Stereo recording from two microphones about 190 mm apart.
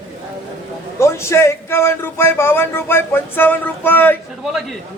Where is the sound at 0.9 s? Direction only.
15° left (ahead or behind).